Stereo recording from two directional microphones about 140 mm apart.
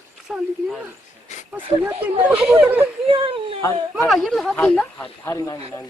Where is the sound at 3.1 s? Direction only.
40° right (ahead or behind).